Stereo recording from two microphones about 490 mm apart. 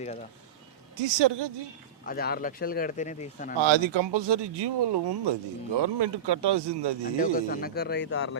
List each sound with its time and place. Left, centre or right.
0.9 s speech: right
2.0 s speech: centre
3.6 s speech: right
7.2 s speech: centre